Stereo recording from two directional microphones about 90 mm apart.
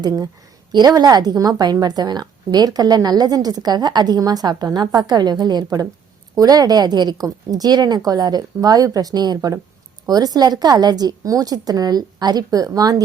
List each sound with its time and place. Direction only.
0.7 s a woman's voice: 50° right (ahead or behind)